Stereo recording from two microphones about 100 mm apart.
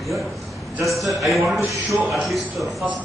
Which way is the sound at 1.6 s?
30° right (ahead or behind).